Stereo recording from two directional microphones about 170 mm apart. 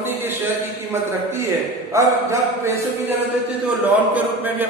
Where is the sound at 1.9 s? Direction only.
15° right (ahead or behind).